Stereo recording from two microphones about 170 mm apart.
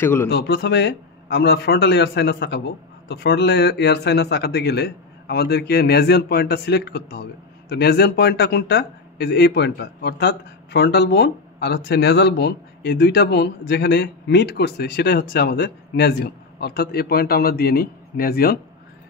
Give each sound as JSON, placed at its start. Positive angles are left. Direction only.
{"t": 0.0, "sound": "speech", "side_deg": 15}
{"t": 0.3, "sound": "a man's voice", "side_deg": 70}